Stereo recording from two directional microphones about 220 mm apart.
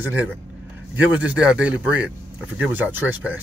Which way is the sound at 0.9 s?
5° right (ahead or behind).